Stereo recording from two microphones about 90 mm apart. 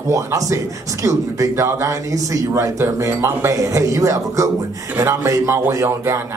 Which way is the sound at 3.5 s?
40° right (ahead or behind).